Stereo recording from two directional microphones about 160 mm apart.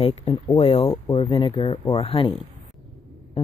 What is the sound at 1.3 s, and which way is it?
Speech, 35° left (ahead or behind).